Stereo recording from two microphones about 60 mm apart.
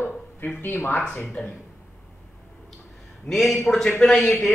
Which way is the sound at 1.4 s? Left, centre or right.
Centre.